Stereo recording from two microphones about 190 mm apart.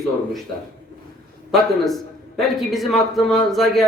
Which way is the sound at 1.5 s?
Centre (ahead or behind).